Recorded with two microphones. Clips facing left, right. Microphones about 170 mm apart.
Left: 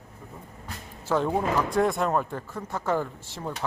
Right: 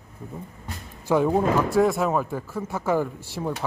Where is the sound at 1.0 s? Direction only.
10° right (ahead or behind).